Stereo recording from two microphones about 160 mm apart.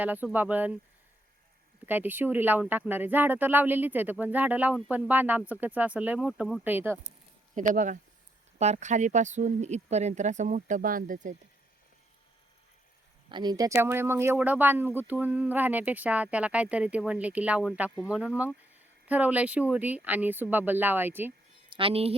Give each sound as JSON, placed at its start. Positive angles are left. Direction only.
{"t": 0.0, "sound": "speech", "side_deg": -10}
{"t": 1.9, "sound": "speech", "side_deg": -10}
{"t": 7.5, "sound": "speech", "side_deg": -55}
{"t": 13.3, "sound": "speech", "side_deg": -25}
{"t": 21.7, "sound": "speech", "side_deg": -35}